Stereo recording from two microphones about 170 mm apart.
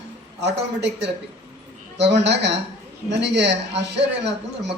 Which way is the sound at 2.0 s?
90° right.